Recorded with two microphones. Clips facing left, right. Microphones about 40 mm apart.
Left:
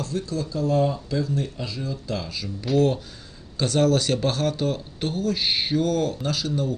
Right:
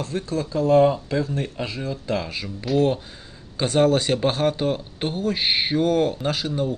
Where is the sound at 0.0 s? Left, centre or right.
Right.